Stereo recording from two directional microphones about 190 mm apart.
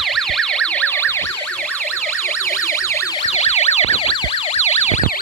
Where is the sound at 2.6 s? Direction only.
15° left (ahead or behind).